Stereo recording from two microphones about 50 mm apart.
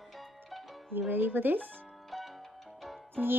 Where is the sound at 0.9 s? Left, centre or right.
Right.